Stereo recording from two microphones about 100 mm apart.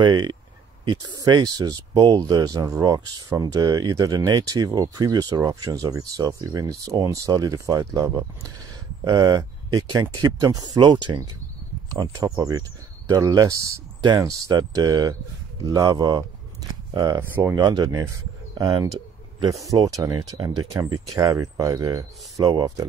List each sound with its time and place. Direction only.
0.0 s speech: 50° right (ahead or behind)
11.9 s speech: 35° right (ahead or behind)
17.2 s speech: 20° right (ahead or behind)
17.6 s speech: 45° right (ahead or behind)
17.8 s speech: 35° right (ahead or behind)
19.6 s speech: 35° right (ahead or behind)